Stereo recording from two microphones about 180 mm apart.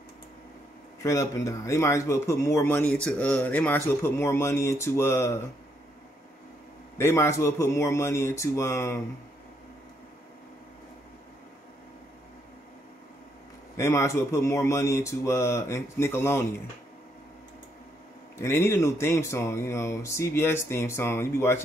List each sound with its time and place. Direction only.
1.0 s speech: 15° left (ahead or behind)
7.0 s speech: 15° left (ahead or behind)
13.7 s speech: 15° left (ahead or behind)
18.4 s speech: 15° left (ahead or behind)